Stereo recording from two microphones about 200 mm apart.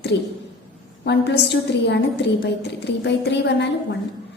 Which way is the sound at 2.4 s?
60° left (ahead or behind).